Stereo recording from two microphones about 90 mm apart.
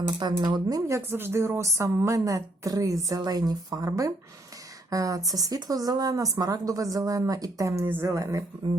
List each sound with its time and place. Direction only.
0.3 s speech: 45° right (ahead or behind)
0.9 s speech: 30° right (ahead or behind)